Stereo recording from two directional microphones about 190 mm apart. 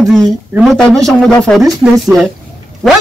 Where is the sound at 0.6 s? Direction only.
Centre (ahead or behind).